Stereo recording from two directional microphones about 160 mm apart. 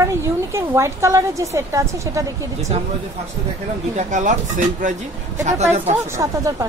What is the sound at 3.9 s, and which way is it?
Speech, 50° right (ahead or behind).